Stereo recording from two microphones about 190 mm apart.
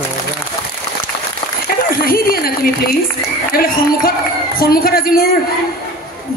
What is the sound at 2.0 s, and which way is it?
Speech, 50° left (ahead or behind).